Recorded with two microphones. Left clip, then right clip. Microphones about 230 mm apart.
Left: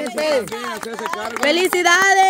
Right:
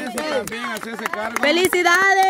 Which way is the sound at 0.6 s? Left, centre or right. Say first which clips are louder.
Left 1 dB; right.